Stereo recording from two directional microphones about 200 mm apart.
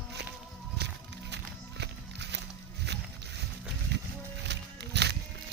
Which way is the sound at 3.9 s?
60° right (ahead or behind).